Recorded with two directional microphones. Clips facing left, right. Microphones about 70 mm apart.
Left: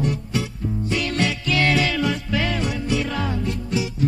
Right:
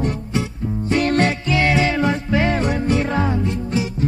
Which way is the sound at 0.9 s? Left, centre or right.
Right.